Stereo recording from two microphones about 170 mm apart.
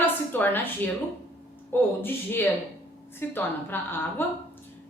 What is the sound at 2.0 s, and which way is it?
A woman's voice, 10° left (ahead or behind).